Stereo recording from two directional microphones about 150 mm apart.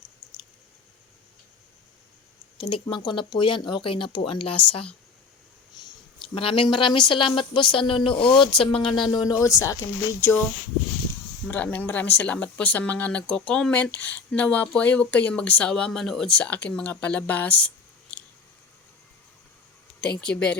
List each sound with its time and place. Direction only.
2.6 s speech: 35° left (ahead or behind)
6.3 s speech: 35° left (ahead or behind); by 10.4 s 15° left (ahead or behind)
11.4 s speech: 10° left (ahead or behind)
18.1 s a sound: 10° left (ahead or behind)
20.0 s speech: 5° left (ahead or behind)